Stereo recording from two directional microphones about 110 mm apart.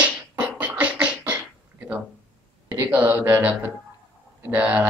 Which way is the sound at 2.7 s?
15° right (ahead or behind).